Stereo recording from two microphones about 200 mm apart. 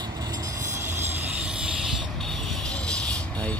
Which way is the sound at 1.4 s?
5° right (ahead or behind).